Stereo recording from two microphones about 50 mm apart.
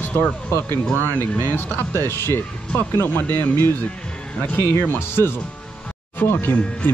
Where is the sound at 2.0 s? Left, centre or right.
Left.